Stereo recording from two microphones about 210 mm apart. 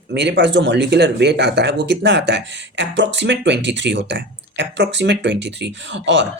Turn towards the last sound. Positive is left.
turn(degrees=-55)  # may be behind; listen again after turning